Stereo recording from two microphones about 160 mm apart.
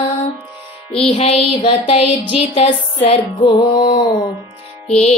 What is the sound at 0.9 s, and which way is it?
Music, 40° left (ahead or behind).